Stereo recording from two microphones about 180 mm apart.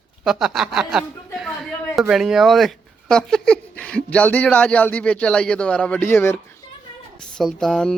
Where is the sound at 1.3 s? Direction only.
Centre (ahead or behind).